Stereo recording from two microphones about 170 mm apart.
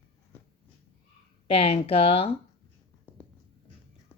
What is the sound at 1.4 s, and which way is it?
Speech, 35° left (ahead or behind).